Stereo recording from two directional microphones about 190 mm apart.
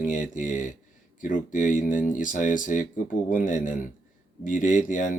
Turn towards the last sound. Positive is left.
turn(degrees=40)  # may be behind; listen again after turning